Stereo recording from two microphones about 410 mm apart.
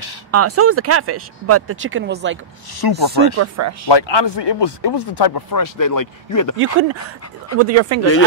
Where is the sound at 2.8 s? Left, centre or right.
Left.